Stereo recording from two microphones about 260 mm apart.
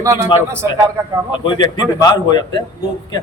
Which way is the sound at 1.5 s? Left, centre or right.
Centre.